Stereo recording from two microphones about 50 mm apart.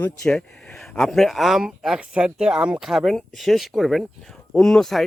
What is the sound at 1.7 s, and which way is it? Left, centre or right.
Speech, centre.